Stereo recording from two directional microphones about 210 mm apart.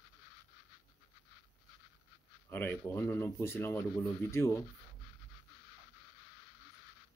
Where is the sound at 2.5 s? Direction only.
10° left (ahead or behind).